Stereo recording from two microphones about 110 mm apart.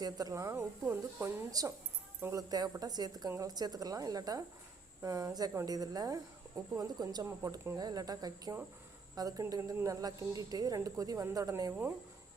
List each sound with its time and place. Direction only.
0.0 s speech: 35° right (ahead or behind)
1.5 s a woman's voice: 35° right (ahead or behind)
7.8 s a woman's voice: 35° right (ahead or behind)